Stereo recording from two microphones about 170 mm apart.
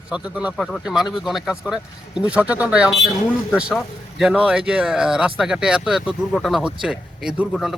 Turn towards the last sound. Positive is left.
turn(degrees=0)  # may be behind; listen again after turning